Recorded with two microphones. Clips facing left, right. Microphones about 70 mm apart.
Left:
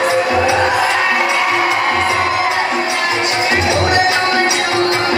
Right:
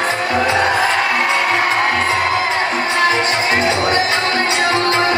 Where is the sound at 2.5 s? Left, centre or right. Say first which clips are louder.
Left 1 dB; right.